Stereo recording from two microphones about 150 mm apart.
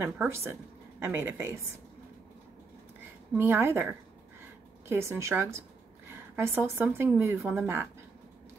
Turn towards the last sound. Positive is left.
turn(degrees=-15)  # may be behind; listen again after turning